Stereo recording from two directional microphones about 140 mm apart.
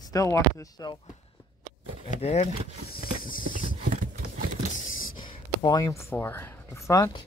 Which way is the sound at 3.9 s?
70° right (ahead or behind).